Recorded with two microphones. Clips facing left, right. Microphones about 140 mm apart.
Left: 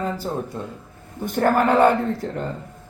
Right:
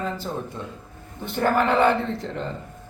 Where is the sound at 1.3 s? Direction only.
45° left (ahead or behind).